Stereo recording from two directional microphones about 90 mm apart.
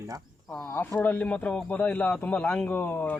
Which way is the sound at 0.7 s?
20° left (ahead or behind).